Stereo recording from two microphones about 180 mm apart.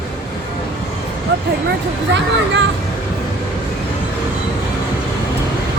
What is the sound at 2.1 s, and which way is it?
Speech, 80° right.